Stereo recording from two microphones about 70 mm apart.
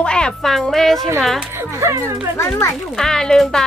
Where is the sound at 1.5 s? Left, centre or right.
Right.